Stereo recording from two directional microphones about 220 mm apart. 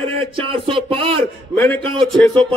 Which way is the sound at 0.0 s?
25° right (ahead or behind).